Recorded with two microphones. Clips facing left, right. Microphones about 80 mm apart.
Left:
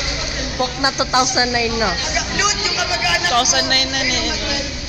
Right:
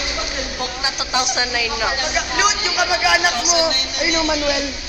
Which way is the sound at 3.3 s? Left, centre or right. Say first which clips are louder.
Left 1 dB; left.